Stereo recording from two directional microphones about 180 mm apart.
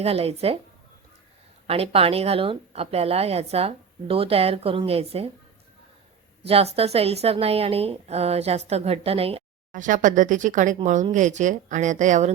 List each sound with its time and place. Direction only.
0.0 s speech: 35° right (ahead or behind)
1.6 s speech: 35° right (ahead or behind)
6.5 s speech: 35° right (ahead or behind)
9.7 s speech: 45° right (ahead or behind)